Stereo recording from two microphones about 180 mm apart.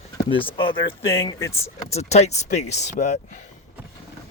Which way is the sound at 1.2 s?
15° left (ahead or behind).